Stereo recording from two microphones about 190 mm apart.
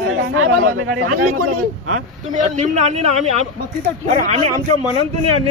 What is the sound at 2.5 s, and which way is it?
A man's voice, 40° right (ahead or behind).